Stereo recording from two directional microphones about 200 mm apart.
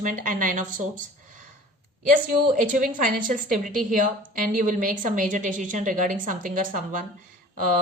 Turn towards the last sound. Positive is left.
turn(degrees=-40)  # may be behind; listen again after turning